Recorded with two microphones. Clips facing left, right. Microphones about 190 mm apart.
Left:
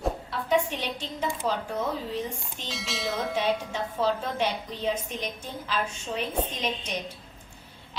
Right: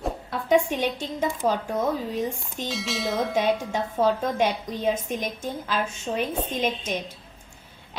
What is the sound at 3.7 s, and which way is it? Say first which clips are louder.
A woman's voice: right 4 dB; 50° right (ahead or behind).